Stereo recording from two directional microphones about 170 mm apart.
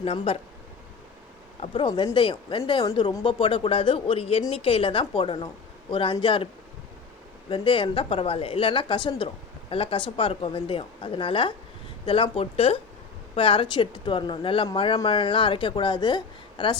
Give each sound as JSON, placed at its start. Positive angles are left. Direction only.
{"t": 0.0, "sound": "speech", "side_deg": 35}
{"t": 1.6, "sound": "speech", "side_deg": 30}
{"t": 7.5, "sound": "speech", "side_deg": 30}